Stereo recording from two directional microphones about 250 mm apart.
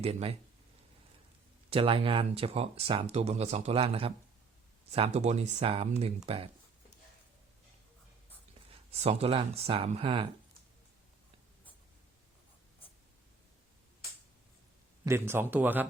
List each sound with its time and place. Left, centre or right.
0.0 s speech: right
1.7 s speech: right
8.9 s speech: right
15.0 s speech: centre